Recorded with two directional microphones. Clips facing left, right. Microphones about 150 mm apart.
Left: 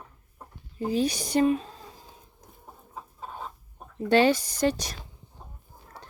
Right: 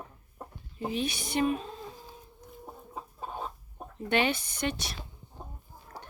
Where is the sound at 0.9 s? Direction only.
40° left (ahead or behind).